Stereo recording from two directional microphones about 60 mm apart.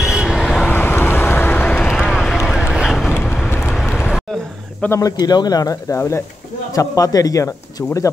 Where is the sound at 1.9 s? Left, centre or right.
Centre.